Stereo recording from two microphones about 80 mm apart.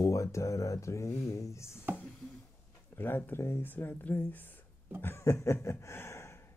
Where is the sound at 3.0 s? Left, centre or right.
Left.